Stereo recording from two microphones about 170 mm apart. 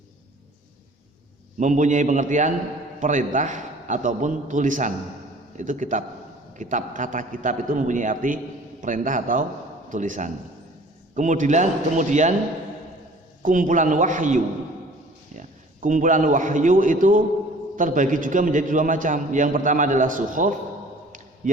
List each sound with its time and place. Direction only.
1.5 s a man's voice: 45° right (ahead or behind)
13.4 s a man's voice: 50° right (ahead or behind)